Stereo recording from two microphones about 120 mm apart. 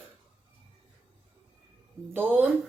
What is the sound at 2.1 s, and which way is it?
Speech, 15° right (ahead or behind).